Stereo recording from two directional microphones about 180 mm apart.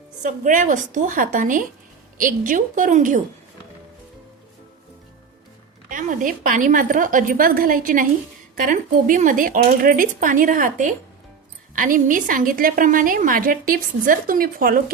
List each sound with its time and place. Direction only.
0.2 s a woman's voice: 45° right (ahead or behind)
5.9 s a woman's voice: 45° right (ahead or behind)